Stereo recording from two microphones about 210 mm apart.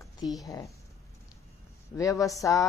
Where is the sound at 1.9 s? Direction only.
15° left (ahead or behind).